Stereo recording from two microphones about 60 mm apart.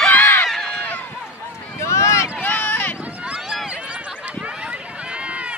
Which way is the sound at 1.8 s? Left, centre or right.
Left.